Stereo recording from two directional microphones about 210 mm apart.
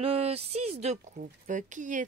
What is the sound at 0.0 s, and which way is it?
A woman's voice, 30° right (ahead or behind).